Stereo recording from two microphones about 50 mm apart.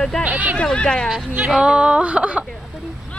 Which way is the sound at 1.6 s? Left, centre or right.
Centre.